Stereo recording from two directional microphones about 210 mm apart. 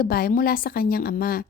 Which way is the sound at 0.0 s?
45° left (ahead or behind).